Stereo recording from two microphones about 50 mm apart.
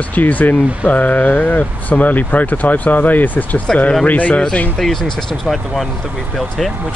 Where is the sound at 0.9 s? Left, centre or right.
Left.